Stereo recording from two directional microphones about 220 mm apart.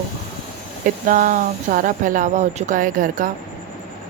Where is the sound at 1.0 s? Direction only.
40° right (ahead or behind).